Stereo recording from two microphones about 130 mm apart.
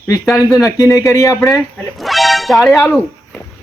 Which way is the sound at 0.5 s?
25° left (ahead or behind).